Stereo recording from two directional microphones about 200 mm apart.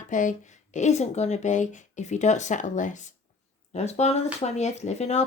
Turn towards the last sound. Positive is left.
turn(degrees=35)  # may be behind; listen again after turning